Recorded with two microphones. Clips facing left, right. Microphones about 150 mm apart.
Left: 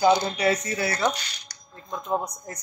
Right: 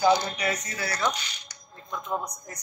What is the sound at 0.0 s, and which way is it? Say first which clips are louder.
Speech: left 3 dB; 30° left (ahead or behind).